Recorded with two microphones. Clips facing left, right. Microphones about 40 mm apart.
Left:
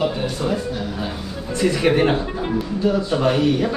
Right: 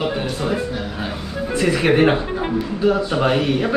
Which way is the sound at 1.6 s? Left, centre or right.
Centre.